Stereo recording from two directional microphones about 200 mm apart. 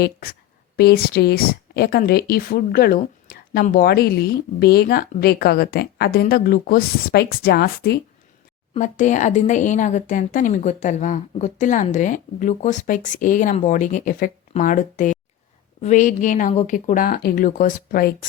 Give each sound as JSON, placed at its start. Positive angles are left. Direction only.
{"t": 0.0, "sound": "a woman's voice", "side_deg": 50}
{"t": 8.7, "sound": "speech", "side_deg": 40}